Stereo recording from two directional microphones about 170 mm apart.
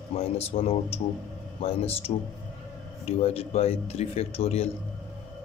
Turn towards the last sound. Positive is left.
turn(degrees=35)  # may be behind; listen again after turning